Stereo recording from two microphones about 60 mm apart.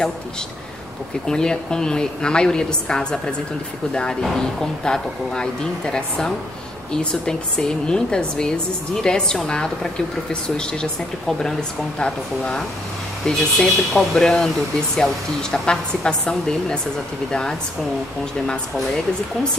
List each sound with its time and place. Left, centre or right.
1.2 s a woman's voice: centre
15.5 s a woman's voice: centre